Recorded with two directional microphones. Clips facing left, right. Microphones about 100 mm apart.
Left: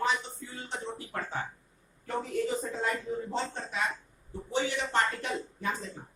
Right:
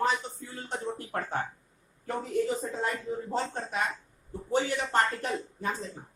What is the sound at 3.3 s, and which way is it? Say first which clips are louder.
Speech: right 3 dB; 50° right (ahead or behind).